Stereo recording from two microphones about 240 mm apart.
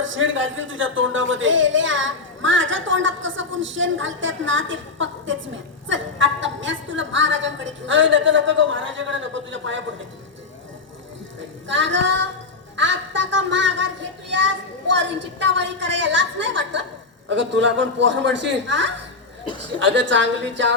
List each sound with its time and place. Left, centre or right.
0.0 s speech: right
11.7 s speech: right